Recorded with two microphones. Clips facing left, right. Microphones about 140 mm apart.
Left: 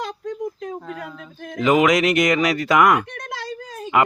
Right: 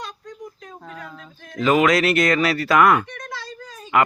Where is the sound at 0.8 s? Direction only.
5° left (ahead or behind).